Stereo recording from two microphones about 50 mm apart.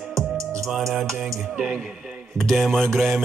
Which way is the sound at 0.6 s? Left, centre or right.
Centre.